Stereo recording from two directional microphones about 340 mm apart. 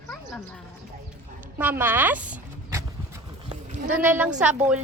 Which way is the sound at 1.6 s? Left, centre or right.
Centre.